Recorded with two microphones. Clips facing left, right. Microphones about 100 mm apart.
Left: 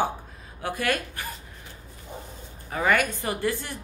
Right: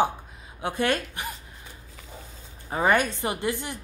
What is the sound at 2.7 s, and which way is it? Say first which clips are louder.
A woman's voice: right 1 dB; 25° right (ahead or behind).